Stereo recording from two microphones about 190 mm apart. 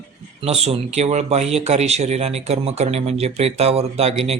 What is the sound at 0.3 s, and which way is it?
Speech, 30° right (ahead or behind).